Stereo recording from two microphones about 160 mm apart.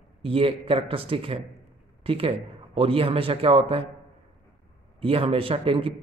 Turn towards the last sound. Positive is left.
turn(degrees=-35)  # may be behind; listen again after turning